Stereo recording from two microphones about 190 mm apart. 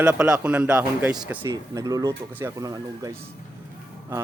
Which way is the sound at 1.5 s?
20° right (ahead or behind).